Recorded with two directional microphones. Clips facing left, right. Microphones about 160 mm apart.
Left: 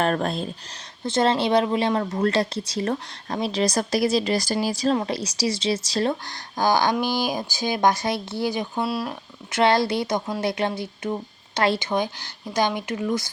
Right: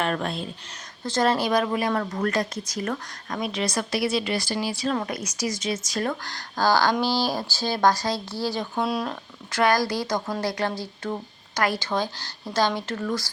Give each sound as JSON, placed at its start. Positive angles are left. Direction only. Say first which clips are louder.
{"t": 0.0, "sound": "a woman's voice", "louder": "left 4 dB", "side_deg": 40}
{"t": 1.0, "sound": "a woman's voice", "louder": "left 2 dB", "side_deg": 20}
{"t": 4.9, "sound": "speech", "louder": "left 3 dB", "side_deg": 30}
{"t": 8.8, "sound": "speech", "louder": "right 1 dB", "side_deg": 5}
{"t": 9.5, "sound": "speech", "louder": "left 2 dB", "side_deg": 25}